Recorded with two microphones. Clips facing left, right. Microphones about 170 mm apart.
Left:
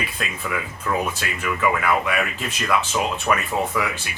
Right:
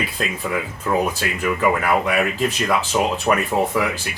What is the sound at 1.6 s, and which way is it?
Speech, 35° right (ahead or behind).